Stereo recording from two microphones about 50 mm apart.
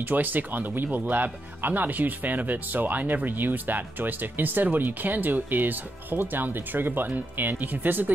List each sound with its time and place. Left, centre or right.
0.0 s speech: right